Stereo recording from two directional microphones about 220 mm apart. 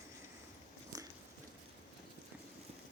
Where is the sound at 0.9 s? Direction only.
15° right (ahead or behind).